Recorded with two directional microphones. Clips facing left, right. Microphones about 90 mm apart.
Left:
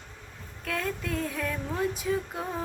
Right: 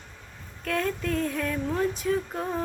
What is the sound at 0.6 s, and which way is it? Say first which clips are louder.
Female singing: right 4 dB; 5° left (ahead or behind).